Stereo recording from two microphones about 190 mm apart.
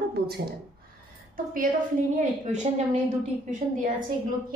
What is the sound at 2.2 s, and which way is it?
Speech, 35° right (ahead or behind).